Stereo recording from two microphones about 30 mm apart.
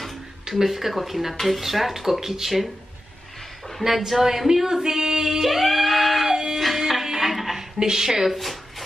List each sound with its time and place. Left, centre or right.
0.7 s speech: centre
3.8 s speech: centre
5.4 s music: centre
6.2 s music: centre
7.8 s a woman's voice: centre
8.3 s a sound: centre